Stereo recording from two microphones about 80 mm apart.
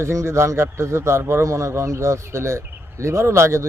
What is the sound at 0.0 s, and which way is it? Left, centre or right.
Speech, right.